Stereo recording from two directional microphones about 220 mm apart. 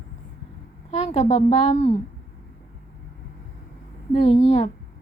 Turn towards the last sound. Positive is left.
turn(degrees=30)  # may be behind; listen again after turning